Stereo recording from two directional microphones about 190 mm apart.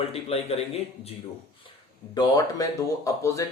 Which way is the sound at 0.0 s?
30° left (ahead or behind).